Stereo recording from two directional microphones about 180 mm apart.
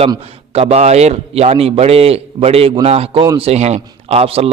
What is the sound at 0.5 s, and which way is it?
A man's voice, 35° right (ahead or behind).